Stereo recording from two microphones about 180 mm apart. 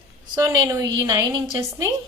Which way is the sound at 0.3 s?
20° right (ahead or behind).